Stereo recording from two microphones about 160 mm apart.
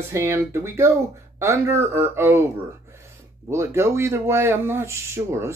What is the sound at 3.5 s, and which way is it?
Speech, 20° right (ahead or behind).